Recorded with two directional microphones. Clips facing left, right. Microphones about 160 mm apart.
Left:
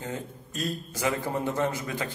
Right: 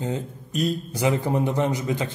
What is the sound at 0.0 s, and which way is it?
A man's voice, 20° right (ahead or behind).